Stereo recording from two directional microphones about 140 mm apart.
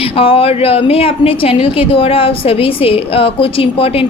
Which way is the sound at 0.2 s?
40° left (ahead or behind).